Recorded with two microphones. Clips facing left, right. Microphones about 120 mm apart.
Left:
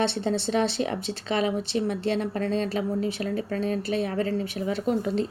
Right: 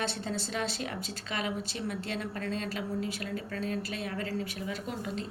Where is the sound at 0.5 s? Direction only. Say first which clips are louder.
Left 9 dB; 25° left (ahead or behind).